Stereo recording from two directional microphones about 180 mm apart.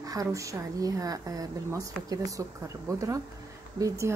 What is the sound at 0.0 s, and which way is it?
A woman's voice, 20° right (ahead or behind).